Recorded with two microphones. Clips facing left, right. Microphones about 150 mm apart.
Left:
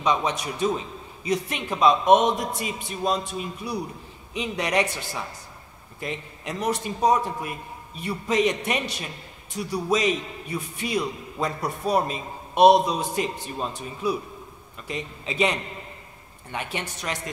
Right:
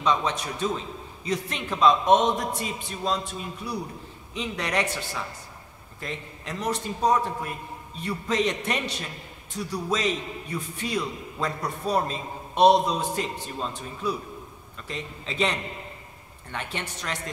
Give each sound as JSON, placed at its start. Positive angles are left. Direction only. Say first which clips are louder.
{"t": 0.0, "sound": "a man's voice", "louder": "left 1 dB", "side_deg": 15}
{"t": 16.5, "sound": "a man's voice", "louder": "left 2 dB", "side_deg": 10}